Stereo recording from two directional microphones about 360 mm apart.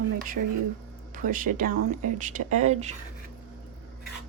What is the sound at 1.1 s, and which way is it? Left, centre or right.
Speech, right.